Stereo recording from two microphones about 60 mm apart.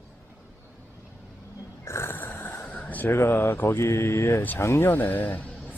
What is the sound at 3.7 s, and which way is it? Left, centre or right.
Speech, left.